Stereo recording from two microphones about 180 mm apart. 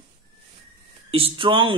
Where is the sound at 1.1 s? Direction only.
30° right (ahead or behind).